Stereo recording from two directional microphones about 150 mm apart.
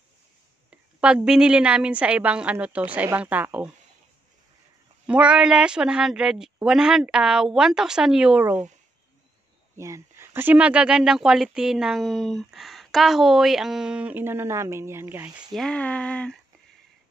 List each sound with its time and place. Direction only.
0.7 s a woman's voice: 5° right (ahead or behind)
5.0 s speech: 10° right (ahead or behind)
9.8 s speech: 20° right (ahead or behind)
15.5 s speech: 5° left (ahead or behind)